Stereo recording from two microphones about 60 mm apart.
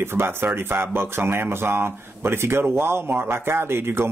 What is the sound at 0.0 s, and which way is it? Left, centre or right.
Speech, right.